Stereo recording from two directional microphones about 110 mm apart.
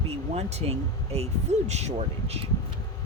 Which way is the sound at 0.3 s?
80° right.